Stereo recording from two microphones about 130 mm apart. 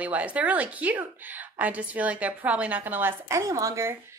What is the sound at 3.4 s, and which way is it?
Speech, 25° right (ahead or behind).